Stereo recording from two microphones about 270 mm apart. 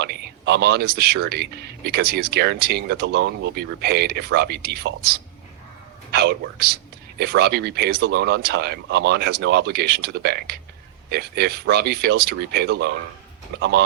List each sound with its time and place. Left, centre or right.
0.0 s speech: right